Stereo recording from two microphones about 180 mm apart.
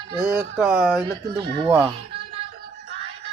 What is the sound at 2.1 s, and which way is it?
Music, 35° right (ahead or behind).